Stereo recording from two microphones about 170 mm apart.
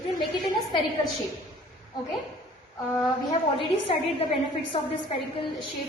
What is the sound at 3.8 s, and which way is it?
Speech, 35° left (ahead or behind).